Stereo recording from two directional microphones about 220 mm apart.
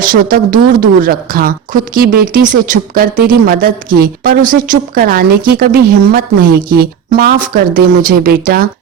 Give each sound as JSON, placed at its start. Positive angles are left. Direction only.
{"t": 0.0, "sound": "a woman's voice", "side_deg": -40}